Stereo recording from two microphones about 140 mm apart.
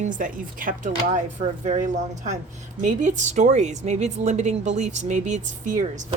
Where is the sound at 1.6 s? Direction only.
60° right (ahead or behind).